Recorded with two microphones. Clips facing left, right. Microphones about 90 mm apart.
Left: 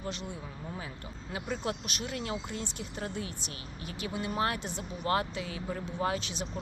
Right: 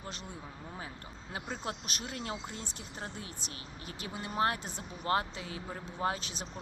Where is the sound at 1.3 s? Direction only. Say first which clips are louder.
Left 4 dB; 35° right (ahead or behind).